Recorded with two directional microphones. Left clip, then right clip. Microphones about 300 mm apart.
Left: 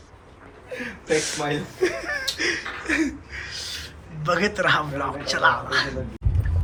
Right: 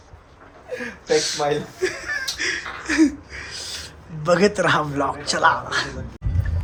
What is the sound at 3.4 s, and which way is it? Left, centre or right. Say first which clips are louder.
Owl: right 1 dB; centre.